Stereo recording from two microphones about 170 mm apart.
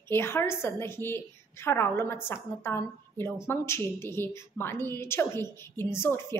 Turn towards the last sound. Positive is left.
turn(degrees=15)  # may be behind; listen again after turning